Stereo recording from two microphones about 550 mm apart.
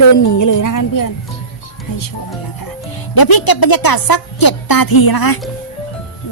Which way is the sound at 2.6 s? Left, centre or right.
Left.